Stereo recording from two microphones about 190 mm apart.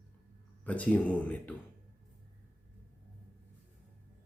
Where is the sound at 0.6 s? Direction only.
5° left (ahead or behind).